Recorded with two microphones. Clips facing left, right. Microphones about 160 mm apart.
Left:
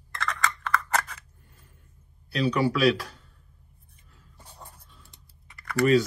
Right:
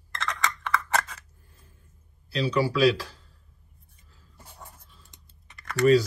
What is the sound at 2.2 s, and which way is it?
Speech, 30° right (ahead or behind).